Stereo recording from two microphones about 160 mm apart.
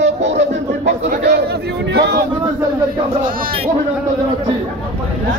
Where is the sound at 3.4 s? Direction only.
65° right (ahead or behind).